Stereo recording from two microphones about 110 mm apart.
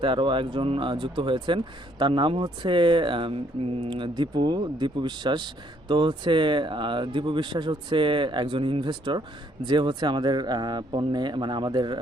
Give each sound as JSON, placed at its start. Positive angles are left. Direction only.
{"t": 0.0, "sound": "speech", "side_deg": -50}